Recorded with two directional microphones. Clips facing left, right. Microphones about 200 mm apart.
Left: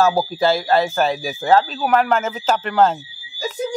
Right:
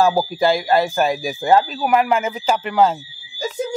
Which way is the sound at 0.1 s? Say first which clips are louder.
Even; 10° right (ahead or behind).